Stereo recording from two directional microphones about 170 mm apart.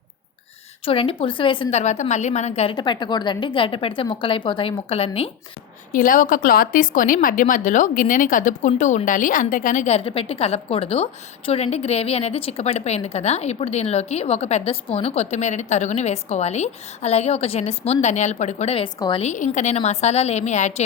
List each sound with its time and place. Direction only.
0.9 s a woman's voice: 30° left (ahead or behind)
1.8 s a woman's voice: 45° left (ahead or behind)
2.7 s a woman's voice: 25° left (ahead or behind)
5.9 s a woman's voice: 50° left (ahead or behind)
18.9 s a woman's voice: 25° left (ahead or behind)
19.2 s a woman's voice: 45° left (ahead or behind)